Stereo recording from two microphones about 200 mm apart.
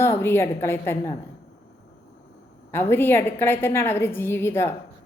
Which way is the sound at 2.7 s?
10° left (ahead or behind).